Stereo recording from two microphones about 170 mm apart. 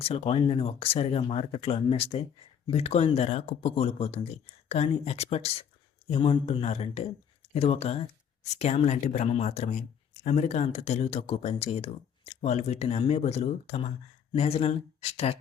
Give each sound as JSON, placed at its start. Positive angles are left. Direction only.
{"t": 0.0, "sound": "speech", "side_deg": 35}